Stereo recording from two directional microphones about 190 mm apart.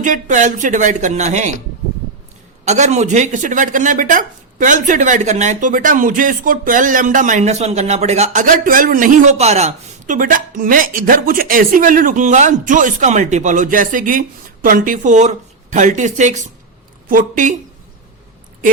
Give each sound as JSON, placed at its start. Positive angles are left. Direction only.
{"t": 0.0, "sound": "speech", "side_deg": -40}
{"t": 2.6, "sound": "speech", "side_deg": -35}